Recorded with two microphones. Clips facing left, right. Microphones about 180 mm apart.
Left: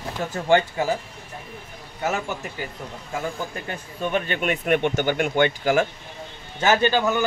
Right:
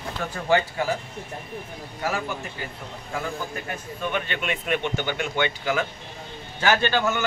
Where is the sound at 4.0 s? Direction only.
40° left (ahead or behind).